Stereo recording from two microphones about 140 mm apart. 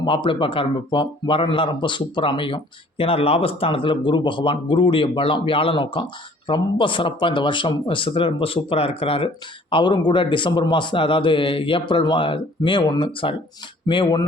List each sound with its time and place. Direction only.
0.0 s speech: 35° left (ahead or behind)